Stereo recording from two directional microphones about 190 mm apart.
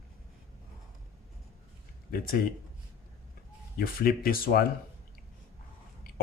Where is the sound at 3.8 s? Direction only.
50° left (ahead or behind).